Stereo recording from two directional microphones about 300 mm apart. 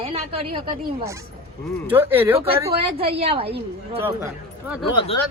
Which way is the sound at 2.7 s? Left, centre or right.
Right.